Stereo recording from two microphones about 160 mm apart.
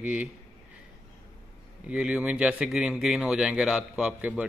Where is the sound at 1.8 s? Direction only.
5° right (ahead or behind).